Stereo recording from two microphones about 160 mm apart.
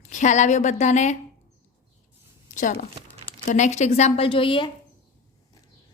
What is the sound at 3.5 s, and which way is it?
A woman's voice, 45° left (ahead or behind).